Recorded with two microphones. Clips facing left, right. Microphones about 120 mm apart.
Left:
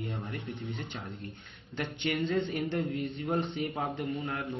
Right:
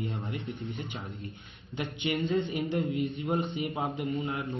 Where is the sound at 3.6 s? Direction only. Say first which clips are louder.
Right 1 dB; 5° right (ahead or behind).